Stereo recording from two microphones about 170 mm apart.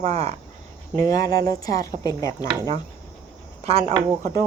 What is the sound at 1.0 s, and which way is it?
Speech, 20° left (ahead or behind).